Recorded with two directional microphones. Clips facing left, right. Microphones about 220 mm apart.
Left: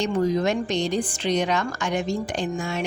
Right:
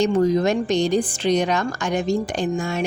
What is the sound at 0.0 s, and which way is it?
Music, 40° right (ahead or behind).